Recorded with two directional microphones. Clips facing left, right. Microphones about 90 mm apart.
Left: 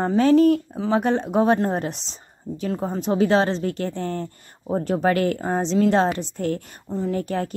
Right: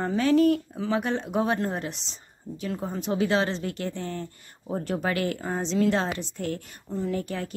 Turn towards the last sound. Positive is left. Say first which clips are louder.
# left 5 dB
turn(degrees=45)  # may be behind; listen again after turning